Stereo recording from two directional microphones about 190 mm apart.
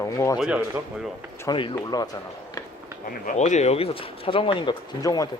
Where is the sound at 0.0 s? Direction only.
15° left (ahead or behind).